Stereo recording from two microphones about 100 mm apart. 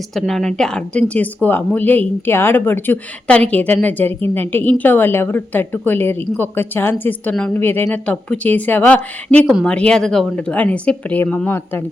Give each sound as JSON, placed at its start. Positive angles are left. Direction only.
{"t": 0.1, "sound": "a woman's voice", "side_deg": 0}